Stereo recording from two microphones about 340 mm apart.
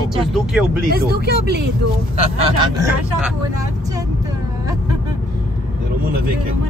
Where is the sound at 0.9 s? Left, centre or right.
Right.